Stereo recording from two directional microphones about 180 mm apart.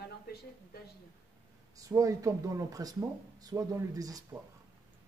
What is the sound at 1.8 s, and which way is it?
Speech, 20° right (ahead or behind).